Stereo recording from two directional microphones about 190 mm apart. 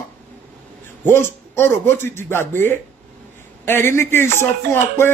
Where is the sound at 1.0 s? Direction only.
10° left (ahead or behind).